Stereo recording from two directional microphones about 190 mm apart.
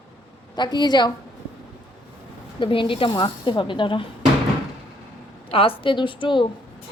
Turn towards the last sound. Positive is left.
turn(degrees=25)  # may be behind; listen again after turning